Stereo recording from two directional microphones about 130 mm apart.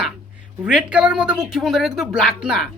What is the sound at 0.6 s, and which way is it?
Speech, 10° right (ahead or behind).